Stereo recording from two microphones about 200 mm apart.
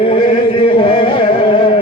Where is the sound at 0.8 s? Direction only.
25° left (ahead or behind).